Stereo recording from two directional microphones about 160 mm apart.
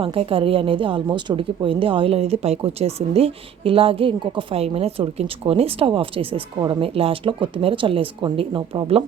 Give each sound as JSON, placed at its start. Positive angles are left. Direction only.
{"t": 0.0, "sound": "a woman's voice", "side_deg": -35}